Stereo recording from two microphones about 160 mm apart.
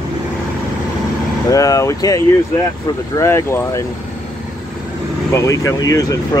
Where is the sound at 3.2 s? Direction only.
15° left (ahead or behind).